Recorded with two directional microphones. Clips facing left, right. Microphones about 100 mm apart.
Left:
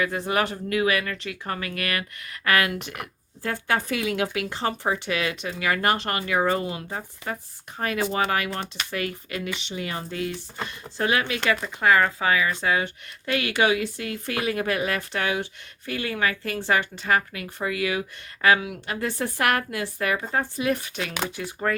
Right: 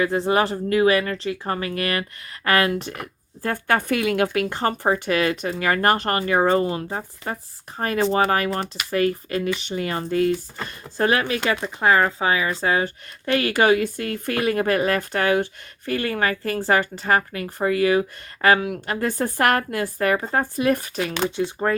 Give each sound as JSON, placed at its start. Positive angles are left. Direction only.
{"t": 0.0, "sound": "speech", "side_deg": -30}
{"t": 3.4, "sound": "speech", "side_deg": -50}
{"t": 11.6, "sound": "speech", "side_deg": -30}
{"t": 21.2, "sound": "speech", "side_deg": -30}